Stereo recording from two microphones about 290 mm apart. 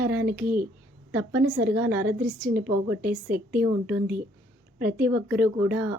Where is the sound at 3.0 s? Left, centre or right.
Right.